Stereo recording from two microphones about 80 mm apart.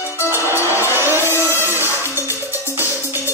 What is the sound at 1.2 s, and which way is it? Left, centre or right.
Music, left.